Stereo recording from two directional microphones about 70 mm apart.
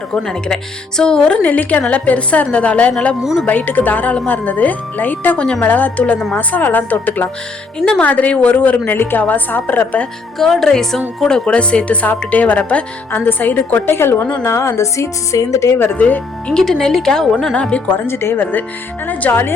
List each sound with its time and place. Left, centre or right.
0.2 s speech: centre; by 10.0 s left
10.3 s speech: centre
13.1 s a woman's voice: left
15.8 s speech: left
16.7 s speech: centre
17.5 s speech: centre
17.9 s a woman's voice: left